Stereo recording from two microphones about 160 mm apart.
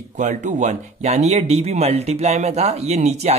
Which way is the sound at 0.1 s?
50° right (ahead or behind).